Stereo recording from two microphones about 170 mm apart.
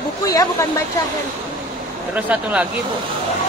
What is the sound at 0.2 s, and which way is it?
Speech, 20° left (ahead or behind).